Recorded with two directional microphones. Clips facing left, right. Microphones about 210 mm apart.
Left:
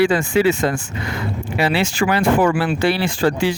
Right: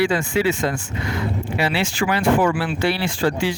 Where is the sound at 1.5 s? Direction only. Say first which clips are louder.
Left 4 dB; 45° left (ahead or behind).